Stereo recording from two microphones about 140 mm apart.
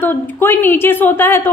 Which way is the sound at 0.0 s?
15° left (ahead or behind).